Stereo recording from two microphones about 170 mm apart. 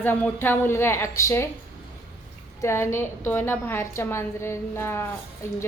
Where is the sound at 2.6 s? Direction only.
15° left (ahead or behind).